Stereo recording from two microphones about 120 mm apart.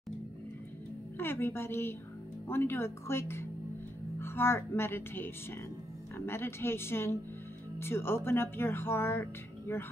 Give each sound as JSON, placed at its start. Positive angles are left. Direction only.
{"t": 1.1, "sound": "speech", "side_deg": 20}